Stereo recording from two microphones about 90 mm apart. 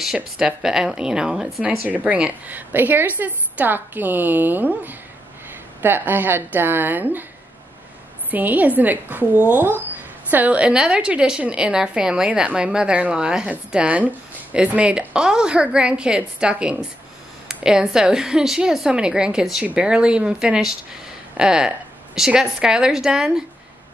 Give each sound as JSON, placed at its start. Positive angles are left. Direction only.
{"t": 0.0, "sound": "a woman's voice", "side_deg": -5}
{"t": 8.3, "sound": "a woman's voice", "side_deg": -20}